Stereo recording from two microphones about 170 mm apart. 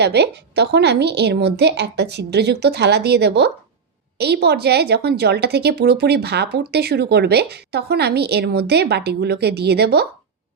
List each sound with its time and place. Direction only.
0.0 s a woman's voice: 80° right